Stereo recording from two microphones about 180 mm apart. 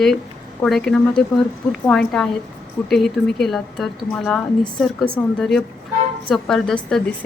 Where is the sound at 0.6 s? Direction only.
5° left (ahead or behind).